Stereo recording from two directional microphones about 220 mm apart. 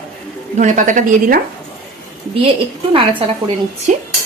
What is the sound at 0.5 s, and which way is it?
Speech, 35° right (ahead or behind).